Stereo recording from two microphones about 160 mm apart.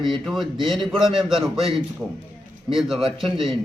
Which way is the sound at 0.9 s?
35° right (ahead or behind).